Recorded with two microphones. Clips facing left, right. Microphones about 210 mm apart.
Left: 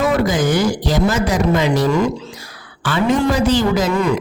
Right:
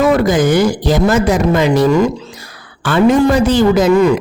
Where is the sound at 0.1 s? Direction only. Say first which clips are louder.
Right 5 dB; 55° right (ahead or behind).